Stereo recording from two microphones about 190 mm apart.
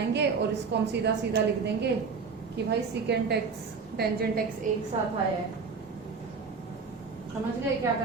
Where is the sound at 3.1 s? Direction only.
60° right (ahead or behind).